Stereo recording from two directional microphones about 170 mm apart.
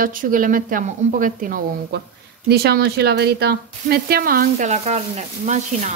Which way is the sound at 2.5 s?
65° right (ahead or behind).